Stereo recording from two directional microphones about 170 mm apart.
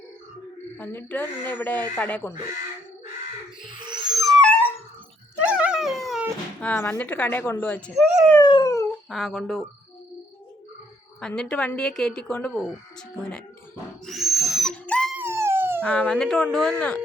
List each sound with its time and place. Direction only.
0.8 s speech: 10° left (ahead or behind)
4.1 s dog: centre (ahead or behind)
5.4 s dog: 5° right (ahead or behind)
6.6 s speech: 10° left (ahead or behind)
8.4 s dog: 25° left (ahead or behind)
9.0 s speech: centre (ahead or behind)
11.2 s speech: 5° left (ahead or behind)
14.0 s owl: centre (ahead or behind)
15.2 s dog: 15° right (ahead or behind)
15.8 s speech: 5° left (ahead or behind)